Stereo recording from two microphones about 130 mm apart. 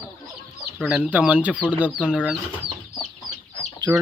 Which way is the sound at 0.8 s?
5° right (ahead or behind).